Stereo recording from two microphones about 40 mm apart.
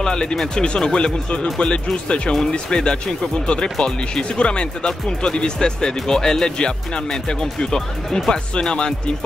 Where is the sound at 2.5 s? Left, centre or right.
Left.